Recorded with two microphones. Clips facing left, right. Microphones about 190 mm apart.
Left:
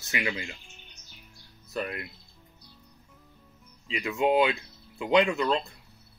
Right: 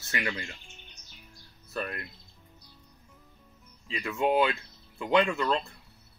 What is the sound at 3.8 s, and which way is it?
Speech, 20° left (ahead or behind).